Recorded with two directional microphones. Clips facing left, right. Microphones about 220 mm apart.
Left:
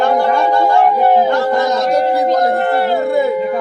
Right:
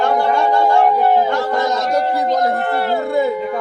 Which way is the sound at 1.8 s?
10° left (ahead or behind).